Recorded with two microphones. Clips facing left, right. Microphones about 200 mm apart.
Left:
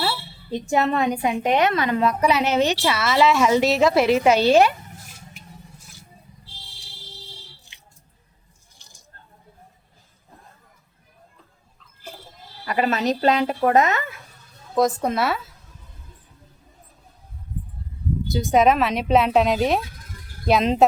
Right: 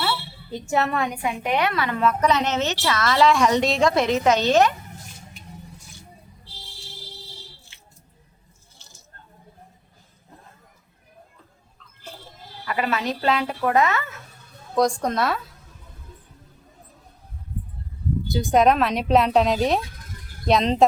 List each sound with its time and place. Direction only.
0.0 s a woman's voice: 20° left (ahead or behind)
8.8 s a sound: 15° left (ahead or behind)
12.6 s a woman's voice: 40° left (ahead or behind)
13.4 s speech: 30° left (ahead or behind)
14.8 s speech: 5° left (ahead or behind)
18.3 s speech: centre (ahead or behind)